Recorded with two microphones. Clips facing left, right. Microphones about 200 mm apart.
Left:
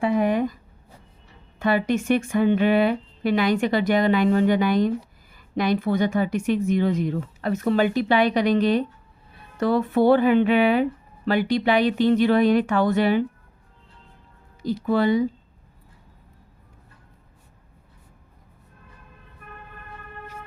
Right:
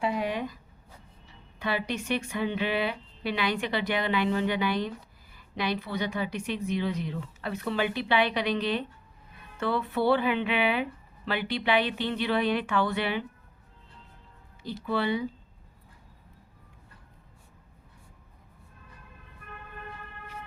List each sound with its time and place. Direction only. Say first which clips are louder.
0.0 s a sound: left 8 dB; 50° left (ahead or behind)
1.5 s a woman's voice: left 9 dB; 50° left (ahead or behind)
14.8 s a woman's voice: left 8 dB; 45° left (ahead or behind)